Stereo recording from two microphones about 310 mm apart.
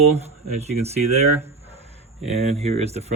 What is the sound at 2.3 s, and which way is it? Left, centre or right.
Speech, centre.